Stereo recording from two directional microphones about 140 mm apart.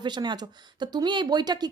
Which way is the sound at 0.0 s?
30° right (ahead or behind).